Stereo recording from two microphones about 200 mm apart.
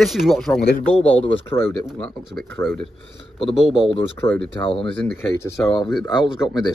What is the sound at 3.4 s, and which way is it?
Speech, 30° left (ahead or behind).